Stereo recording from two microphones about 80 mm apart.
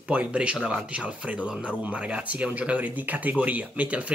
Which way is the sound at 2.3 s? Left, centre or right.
Centre.